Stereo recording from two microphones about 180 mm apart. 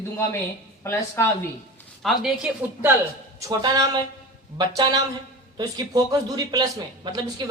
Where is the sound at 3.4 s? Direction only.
20° right (ahead or behind).